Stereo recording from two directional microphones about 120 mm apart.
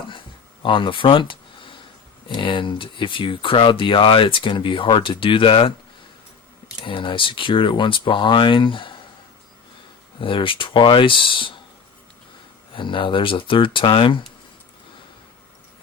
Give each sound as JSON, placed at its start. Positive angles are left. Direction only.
{"t": 0.6, "sound": "speech", "side_deg": 45}
{"t": 6.8, "sound": "speech", "side_deg": 45}
{"t": 10.2, "sound": "speech", "side_deg": 45}
{"t": 12.7, "sound": "speech", "side_deg": 45}